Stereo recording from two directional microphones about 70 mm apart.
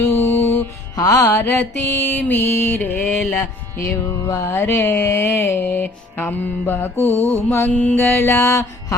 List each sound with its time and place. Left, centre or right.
0.0 s music: left
0.9 s music: left
1.5 s mantra: left
3.1 s music: centre
4.4 s mantra: left
4.7 s mantra: left